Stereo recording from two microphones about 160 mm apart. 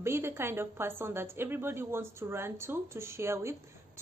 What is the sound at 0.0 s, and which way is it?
A woman's voice, 15° right (ahead or behind).